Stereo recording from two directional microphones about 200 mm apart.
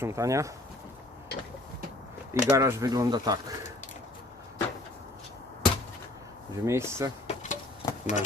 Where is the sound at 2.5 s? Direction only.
15° right (ahead or behind).